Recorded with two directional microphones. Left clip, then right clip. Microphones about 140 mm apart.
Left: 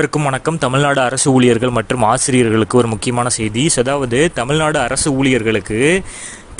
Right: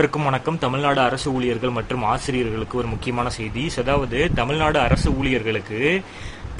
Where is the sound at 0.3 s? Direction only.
45° left (ahead or behind); by 3.2 s 65° left (ahead or behind).